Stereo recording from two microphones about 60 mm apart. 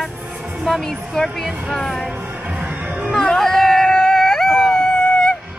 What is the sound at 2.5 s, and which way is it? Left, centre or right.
Music, right.